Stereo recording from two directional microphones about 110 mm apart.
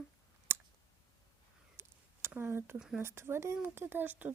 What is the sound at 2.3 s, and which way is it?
A woman's voice, 20° right (ahead or behind).